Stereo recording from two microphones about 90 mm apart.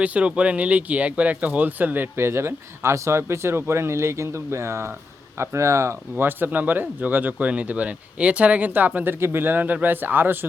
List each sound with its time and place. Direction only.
0.0 s speech: 15° right (ahead or behind)